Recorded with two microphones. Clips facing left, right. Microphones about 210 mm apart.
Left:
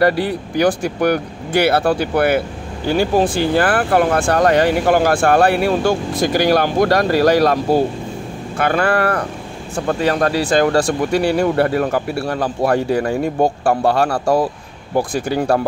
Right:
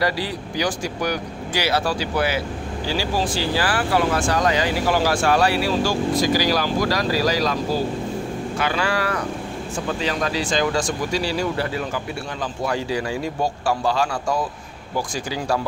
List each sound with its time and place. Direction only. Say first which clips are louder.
0.0 s speech: left 8 dB; 55° left (ahead or behind)